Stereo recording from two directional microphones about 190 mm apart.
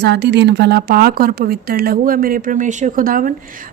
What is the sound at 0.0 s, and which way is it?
A woman's voice, 65° right (ahead or behind).